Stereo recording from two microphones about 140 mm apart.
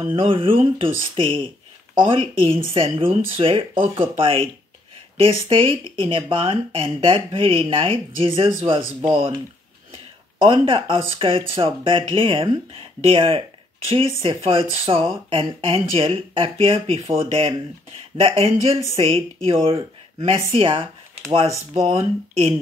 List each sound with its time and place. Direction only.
0.1 s speech: 40° right (ahead or behind)
10.4 s speech: 40° right (ahead or behind)